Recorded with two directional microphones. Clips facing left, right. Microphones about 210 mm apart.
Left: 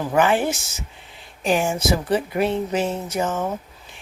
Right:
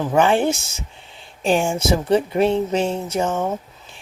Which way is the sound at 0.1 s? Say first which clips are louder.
Right 2 dB; 25° right (ahead or behind).